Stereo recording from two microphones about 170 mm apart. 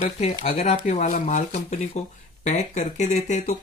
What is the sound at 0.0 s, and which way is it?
Speech, 40° left (ahead or behind).